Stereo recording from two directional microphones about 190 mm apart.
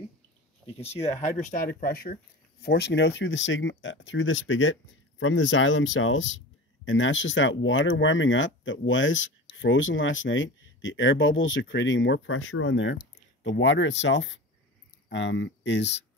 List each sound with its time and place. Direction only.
0.7 s speech: 30° left (ahead or behind); by 4.7 s 90° left
5.2 s speech: 75° left (ahead or behind)